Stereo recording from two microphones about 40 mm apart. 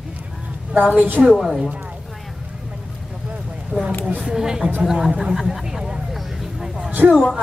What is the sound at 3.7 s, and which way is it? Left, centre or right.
Speech, centre.